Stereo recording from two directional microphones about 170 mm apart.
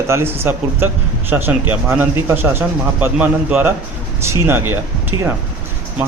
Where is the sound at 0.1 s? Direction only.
15° right (ahead or behind).